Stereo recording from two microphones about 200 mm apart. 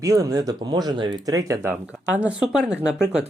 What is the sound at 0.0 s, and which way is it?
Speech, 15° right (ahead or behind).